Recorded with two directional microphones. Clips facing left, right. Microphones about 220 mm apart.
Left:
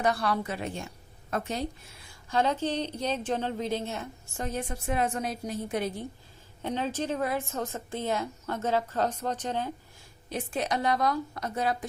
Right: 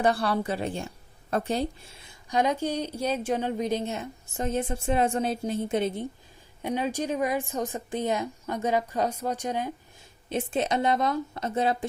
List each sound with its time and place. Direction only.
0.0 s a woman's voice: 30° right (ahead or behind)
6.6 s a woman's voice: 10° right (ahead or behind)
10.2 s a woman's voice: 25° right (ahead or behind)